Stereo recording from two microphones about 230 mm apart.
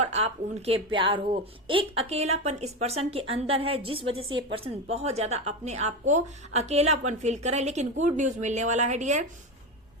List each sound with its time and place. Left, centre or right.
0.0 s a woman's voice: right